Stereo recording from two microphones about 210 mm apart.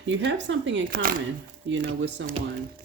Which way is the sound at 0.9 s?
45° right (ahead or behind).